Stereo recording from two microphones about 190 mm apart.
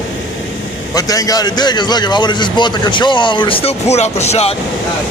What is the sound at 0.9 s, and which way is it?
A man's voice, 20° left (ahead or behind).